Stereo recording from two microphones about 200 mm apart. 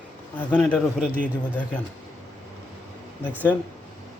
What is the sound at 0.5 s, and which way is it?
Speech, 5° left (ahead or behind).